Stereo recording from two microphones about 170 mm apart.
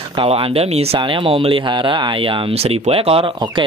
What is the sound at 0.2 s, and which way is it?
Speech, 35° right (ahead or behind).